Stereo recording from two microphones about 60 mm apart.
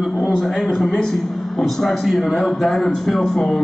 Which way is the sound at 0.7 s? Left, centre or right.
Centre.